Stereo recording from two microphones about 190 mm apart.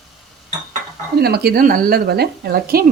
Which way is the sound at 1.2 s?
55° right (ahead or behind).